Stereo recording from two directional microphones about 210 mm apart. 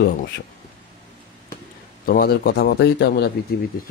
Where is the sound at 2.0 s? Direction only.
45° left (ahead or behind).